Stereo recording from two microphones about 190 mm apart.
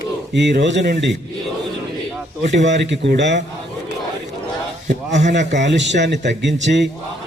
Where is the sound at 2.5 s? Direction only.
65° right (ahead or behind).